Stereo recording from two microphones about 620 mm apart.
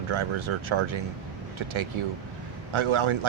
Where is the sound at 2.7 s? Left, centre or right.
Right.